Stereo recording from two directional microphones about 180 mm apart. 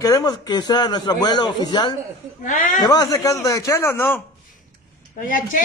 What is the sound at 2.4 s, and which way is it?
Speech, 45° left (ahead or behind).